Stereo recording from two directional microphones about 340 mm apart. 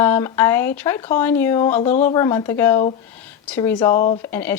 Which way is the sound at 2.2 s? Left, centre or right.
Centre.